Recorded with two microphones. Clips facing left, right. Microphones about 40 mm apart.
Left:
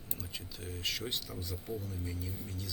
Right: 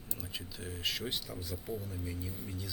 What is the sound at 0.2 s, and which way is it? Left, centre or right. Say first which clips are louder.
Speech: right 3 dB; centre.